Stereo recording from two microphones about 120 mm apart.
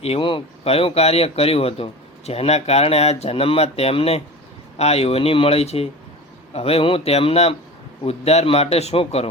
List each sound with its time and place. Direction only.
0.0 s speech: 50° left (ahead or behind)